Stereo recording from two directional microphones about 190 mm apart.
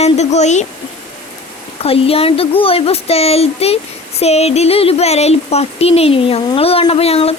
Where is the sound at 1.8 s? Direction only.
30° left (ahead or behind).